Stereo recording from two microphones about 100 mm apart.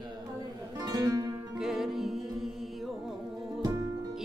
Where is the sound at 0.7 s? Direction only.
45° right (ahead or behind).